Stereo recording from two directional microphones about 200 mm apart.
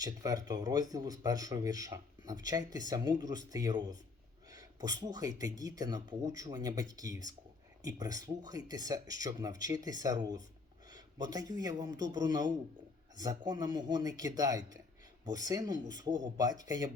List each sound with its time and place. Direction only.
0.0 s a man's voice: 20° right (ahead or behind)